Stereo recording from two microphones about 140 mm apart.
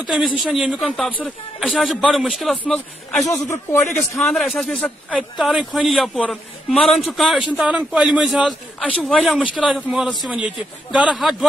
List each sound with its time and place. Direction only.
0.0 s a man's voice: 5° right (ahead or behind)
3.4 s speech: 15° left (ahead or behind)
4.2 s a man's voice: centre (ahead or behind)
5.4 s a man's voice: 5° right (ahead or behind)